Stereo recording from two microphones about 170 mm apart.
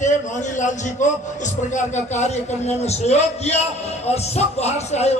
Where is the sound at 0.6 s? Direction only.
45° left (ahead or behind).